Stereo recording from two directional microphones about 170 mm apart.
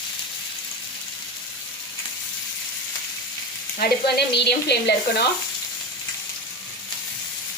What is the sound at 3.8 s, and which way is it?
Speech, 75° left (ahead or behind).